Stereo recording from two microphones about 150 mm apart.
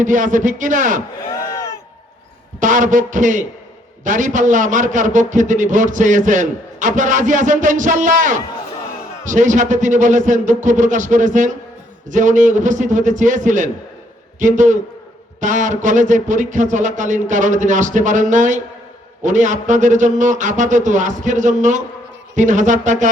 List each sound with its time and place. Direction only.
0.0 s a man's voice: 60° right (ahead or behind)
1.4 s a sound: 20° left (ahead or behind)
2.6 s a man's voice: 60° right (ahead or behind)